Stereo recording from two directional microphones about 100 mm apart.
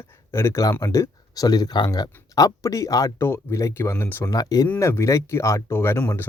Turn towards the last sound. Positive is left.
turn(degrees=20)  # may be behind; listen again after turning